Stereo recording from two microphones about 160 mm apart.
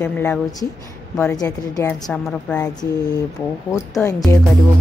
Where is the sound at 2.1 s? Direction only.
5° left (ahead or behind).